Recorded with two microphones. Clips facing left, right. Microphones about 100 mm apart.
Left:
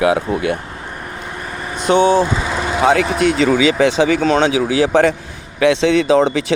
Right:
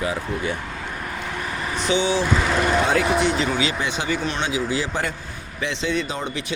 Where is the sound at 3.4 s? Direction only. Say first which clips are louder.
Left 10 dB; 90° left; by 5.1 s 70° left (ahead or behind).